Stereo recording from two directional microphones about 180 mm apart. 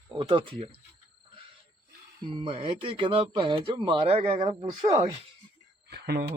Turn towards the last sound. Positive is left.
turn(degrees=-65)  # may be behind; listen again after turning